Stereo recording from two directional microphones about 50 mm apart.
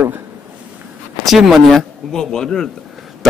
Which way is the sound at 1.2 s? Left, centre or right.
Centre.